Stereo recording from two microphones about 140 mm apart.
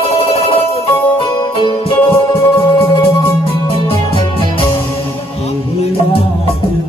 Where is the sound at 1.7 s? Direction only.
40° left (ahead or behind).